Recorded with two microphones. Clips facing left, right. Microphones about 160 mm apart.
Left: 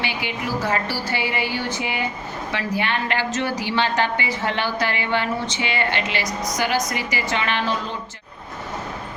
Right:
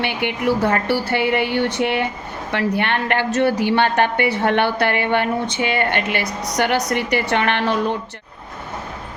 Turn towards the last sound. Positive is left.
turn(degrees=-65)  # may be behind; listen again after turning